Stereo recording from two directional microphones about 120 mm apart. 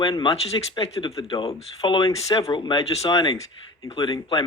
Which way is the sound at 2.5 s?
35° left (ahead or behind).